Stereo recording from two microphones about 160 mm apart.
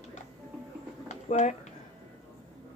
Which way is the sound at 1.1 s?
45° left (ahead or behind).